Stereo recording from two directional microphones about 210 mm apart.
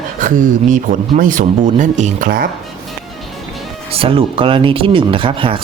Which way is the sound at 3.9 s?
25° right (ahead or behind).